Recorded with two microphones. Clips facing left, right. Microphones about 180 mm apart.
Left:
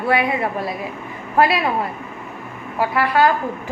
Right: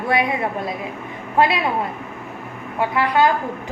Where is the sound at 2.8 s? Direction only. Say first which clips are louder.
Left 1 dB; 20° right (ahead or behind).